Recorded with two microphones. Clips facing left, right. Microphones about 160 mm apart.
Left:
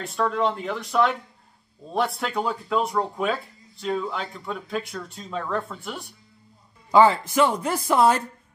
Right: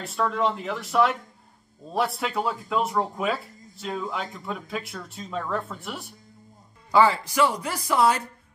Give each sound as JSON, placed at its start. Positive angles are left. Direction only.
{"t": 0.0, "sound": "speech", "side_deg": 0}
{"t": 6.9, "sound": "speech", "side_deg": 20}